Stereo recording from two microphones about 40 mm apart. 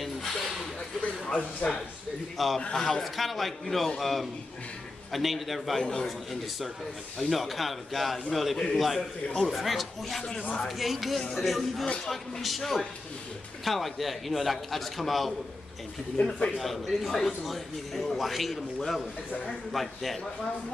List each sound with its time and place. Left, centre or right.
0.0 s a sound: centre
0.7 s a sound: left
2.3 s a man's voice: centre
2.7 s a man's voice: centre
3.0 s a man's voice: centre
5.8 s a man's voice: centre
6.0 s a man's voice: centre
16.2 s a man's voice: left
16.5 s a man's voice: centre